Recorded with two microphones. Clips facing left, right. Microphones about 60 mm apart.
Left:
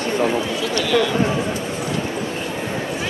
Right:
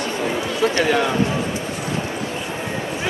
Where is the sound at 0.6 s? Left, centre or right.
Right.